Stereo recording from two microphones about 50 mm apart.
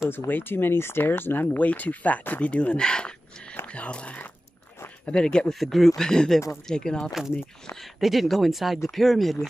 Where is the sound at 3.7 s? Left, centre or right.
Left.